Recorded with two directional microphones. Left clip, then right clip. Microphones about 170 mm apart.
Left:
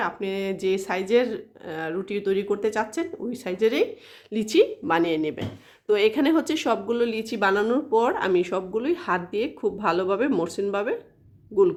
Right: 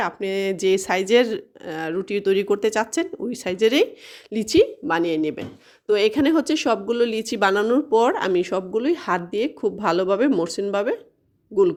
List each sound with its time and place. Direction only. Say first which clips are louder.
0.0 s speech: right 4 dB; 40° right (ahead or behind)
4.3 s speech: right 2 dB; 35° right (ahead or behind)